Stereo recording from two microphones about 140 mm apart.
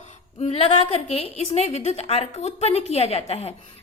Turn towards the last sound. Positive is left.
turn(degrees=50)  # may be behind; listen again after turning